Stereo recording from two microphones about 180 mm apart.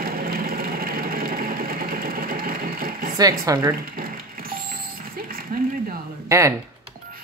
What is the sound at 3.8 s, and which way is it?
Mechanisms, 55° right (ahead or behind).